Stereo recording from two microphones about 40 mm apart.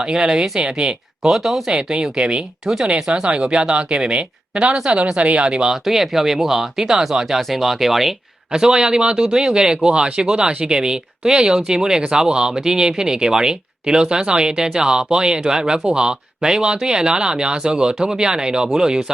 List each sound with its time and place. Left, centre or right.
0.0 s speech: centre
1.3 s speech: centre
1.7 s speech: right
5.1 s speech: right
5.7 s speech: centre
8.5 s speech: centre